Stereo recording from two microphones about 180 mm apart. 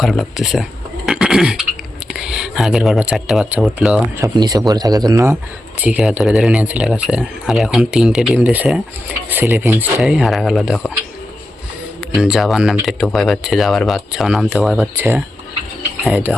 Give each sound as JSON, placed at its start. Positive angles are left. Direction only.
{"t": 0.0, "sound": "speech", "side_deg": 0}
{"t": 4.2, "sound": "speech", "side_deg": -20}
{"t": 11.9, "sound": "speech", "side_deg": 0}
{"t": 14.9, "sound": "speech", "side_deg": -15}
{"t": 16.0, "sound": "speech", "side_deg": 0}